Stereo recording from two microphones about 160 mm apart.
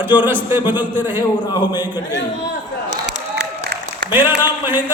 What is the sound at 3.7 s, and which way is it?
Applause, 90° right.